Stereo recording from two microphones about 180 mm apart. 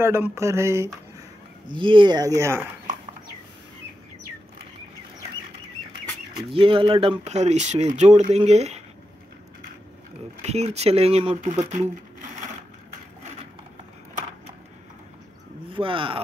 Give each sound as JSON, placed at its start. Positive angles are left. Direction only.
{"t": 0.0, "sound": "a sound", "side_deg": -15}
{"t": 1.7, "sound": "speech", "side_deg": -25}
{"t": 6.5, "sound": "speech", "side_deg": -30}
{"t": 10.4, "sound": "speech", "side_deg": -35}
{"t": 15.7, "sound": "speech", "side_deg": -30}